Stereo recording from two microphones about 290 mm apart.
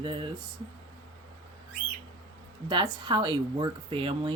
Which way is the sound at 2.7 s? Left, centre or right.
Centre.